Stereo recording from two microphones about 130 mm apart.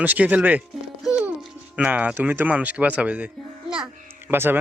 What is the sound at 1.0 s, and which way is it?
Music, 5° right (ahead or behind).